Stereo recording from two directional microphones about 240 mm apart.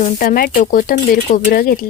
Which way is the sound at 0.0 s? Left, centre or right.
Left.